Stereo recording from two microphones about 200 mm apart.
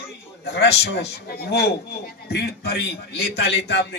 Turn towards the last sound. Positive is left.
turn(degrees=55)  # may be behind; listen again after turning